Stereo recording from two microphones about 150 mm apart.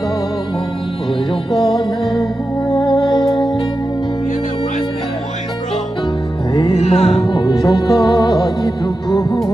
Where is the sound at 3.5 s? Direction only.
35° left (ahead or behind).